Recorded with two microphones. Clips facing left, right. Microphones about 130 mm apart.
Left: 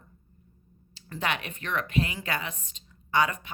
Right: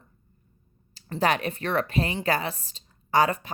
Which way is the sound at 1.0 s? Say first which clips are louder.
Right 7 dB; 35° right (ahead or behind).